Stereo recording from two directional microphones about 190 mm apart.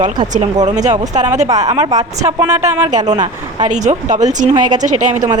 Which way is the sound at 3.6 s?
40° right (ahead or behind).